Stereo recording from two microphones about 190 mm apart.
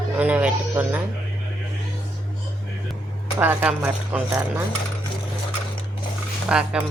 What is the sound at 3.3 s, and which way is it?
Speech, 10° right (ahead or behind).